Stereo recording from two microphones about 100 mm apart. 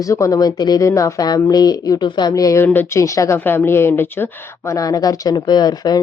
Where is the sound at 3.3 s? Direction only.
20° left (ahead or behind).